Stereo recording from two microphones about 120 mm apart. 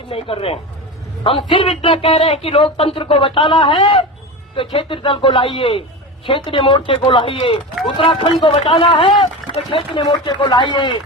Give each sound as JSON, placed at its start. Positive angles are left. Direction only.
{"t": 0.1, "sound": "speech", "side_deg": 50}